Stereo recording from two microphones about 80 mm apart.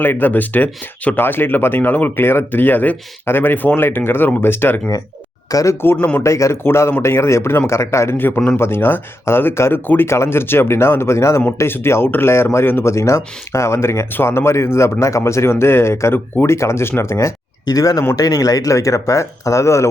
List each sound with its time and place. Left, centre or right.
0.0 s speech: left
5.5 s speech: left
5.8 s speech: left
17.7 s speech: left